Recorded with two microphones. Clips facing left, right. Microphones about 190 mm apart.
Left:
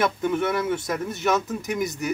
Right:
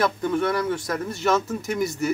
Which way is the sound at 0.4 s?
20° left (ahead or behind).